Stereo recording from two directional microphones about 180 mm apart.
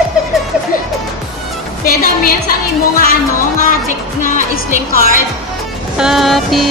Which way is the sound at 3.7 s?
45° left (ahead or behind).